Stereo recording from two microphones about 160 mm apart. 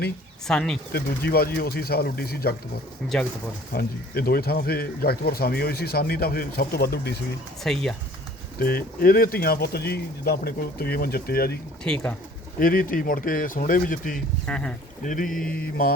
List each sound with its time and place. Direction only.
0.4 s speech: 5° left (ahead or behind)
0.9 s speech: 70° left (ahead or behind)
3.7 s speech: 70° left (ahead or behind)
7.6 s speech: 5° left (ahead or behind)
8.5 s speech: 70° left (ahead or behind)
11.8 s speech: 5° left (ahead or behind)
12.5 s speech: 60° left (ahead or behind)
14.4 s speech: 5° left (ahead or behind)
15.0 s speech: 55° left (ahead or behind)
15.5 s speech: 70° left (ahead or behind)